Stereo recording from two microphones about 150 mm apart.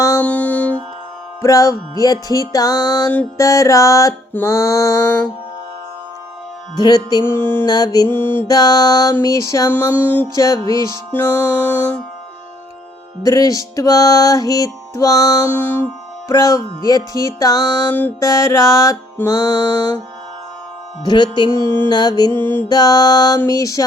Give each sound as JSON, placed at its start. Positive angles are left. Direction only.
{"t": 0.2, "sound": "music", "side_deg": 10}
{"t": 1.4, "sound": "music", "side_deg": 20}
{"t": 6.7, "sound": "music", "side_deg": 25}
{"t": 7.7, "sound": "music", "side_deg": 25}
{"t": 13.2, "sound": "music", "side_deg": 25}
{"t": 15.6, "sound": "music", "side_deg": 15}
{"t": 16.3, "sound": "music", "side_deg": 25}
{"t": 21.0, "sound": "music", "side_deg": 30}
{"t": 21.6, "sound": "music", "side_deg": 15}
{"t": 21.8, "sound": "music", "side_deg": 25}
{"t": 22.4, "sound": "music", "side_deg": 15}
{"t": 22.7, "sound": "music", "side_deg": 25}